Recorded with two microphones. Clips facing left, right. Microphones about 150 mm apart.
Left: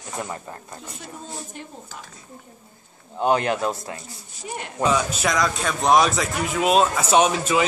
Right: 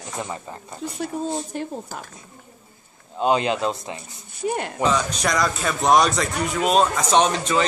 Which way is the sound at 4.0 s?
60° right (ahead or behind).